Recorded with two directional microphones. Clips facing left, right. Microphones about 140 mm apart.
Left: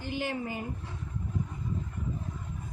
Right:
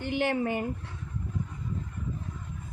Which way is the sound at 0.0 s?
65° right (ahead or behind).